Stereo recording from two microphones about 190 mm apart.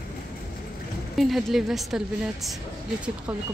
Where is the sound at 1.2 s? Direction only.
Centre (ahead or behind).